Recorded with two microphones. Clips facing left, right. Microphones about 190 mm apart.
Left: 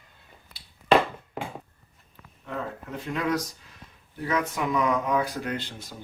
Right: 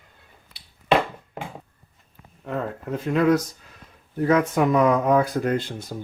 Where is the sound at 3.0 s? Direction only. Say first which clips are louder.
Right 8 dB; 50° right (ahead or behind).